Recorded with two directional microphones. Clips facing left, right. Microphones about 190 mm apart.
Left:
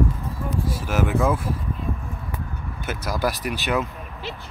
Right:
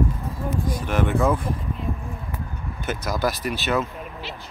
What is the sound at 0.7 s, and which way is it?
Speech, 5° left (ahead or behind).